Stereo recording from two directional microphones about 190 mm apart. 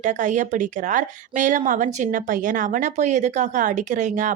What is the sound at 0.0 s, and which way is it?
A woman's voice, 40° right (ahead or behind).